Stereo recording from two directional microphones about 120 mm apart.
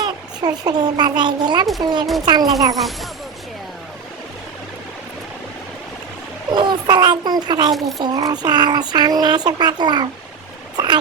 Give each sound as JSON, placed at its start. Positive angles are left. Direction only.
{"t": 0.0, "sound": "a child's voice", "side_deg": -35}
{"t": 2.7, "sound": "speech", "side_deg": 0}
{"t": 6.5, "sound": "speech", "side_deg": -40}